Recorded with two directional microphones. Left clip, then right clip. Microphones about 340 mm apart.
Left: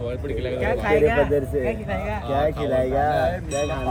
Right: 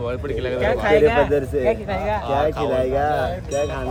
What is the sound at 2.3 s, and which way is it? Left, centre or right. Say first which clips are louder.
Speech: even; centre.